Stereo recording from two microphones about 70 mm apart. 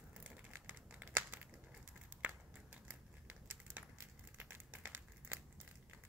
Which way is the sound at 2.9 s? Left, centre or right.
Right.